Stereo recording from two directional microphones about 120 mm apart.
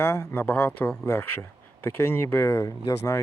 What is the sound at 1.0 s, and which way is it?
Speech, 20° left (ahead or behind).